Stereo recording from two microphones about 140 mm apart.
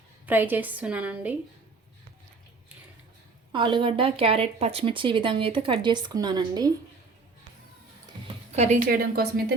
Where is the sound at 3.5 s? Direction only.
35° right (ahead or behind).